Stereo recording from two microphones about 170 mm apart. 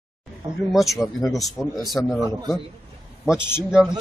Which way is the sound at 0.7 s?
Centre (ahead or behind).